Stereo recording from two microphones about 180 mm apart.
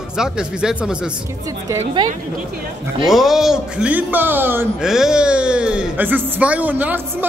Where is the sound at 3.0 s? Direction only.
Centre (ahead or behind).